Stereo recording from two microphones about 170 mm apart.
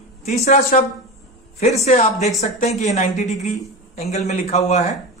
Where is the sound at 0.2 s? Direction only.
40° left (ahead or behind).